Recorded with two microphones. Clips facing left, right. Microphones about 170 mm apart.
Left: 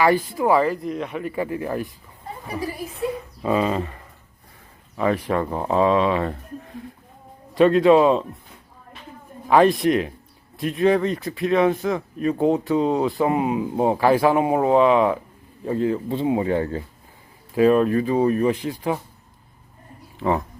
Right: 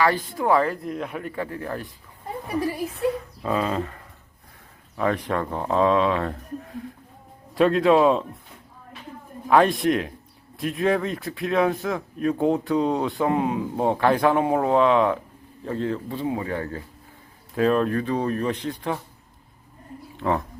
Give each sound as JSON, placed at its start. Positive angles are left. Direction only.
{"t": 0.3, "sound": "speech", "side_deg": 5}
{"t": 3.4, "sound": "speech", "side_deg": 5}
{"t": 9.5, "sound": "speech", "side_deg": 0}
{"t": 16.0, "sound": "speech", "side_deg": 20}
{"t": 17.5, "sound": "speech", "side_deg": 5}
{"t": 20.1, "sound": "speech", "side_deg": 5}